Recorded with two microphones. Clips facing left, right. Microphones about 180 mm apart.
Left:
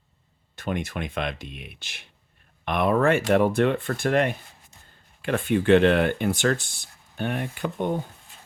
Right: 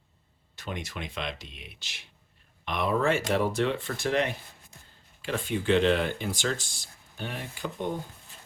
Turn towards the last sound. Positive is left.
turn(degrees=55)  # may be behind; listen again after turning